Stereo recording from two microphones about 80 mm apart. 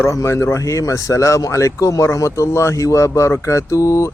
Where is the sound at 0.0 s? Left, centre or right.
Left.